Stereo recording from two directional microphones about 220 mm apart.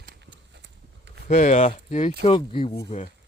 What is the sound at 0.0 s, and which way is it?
Horse, 45° right (ahead or behind).